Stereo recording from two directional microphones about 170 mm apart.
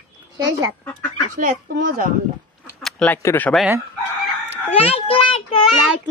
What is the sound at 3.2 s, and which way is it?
Speech, 15° left (ahead or behind).